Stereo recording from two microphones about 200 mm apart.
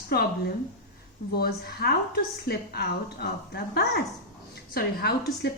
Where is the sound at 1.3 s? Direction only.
50° left (ahead or behind).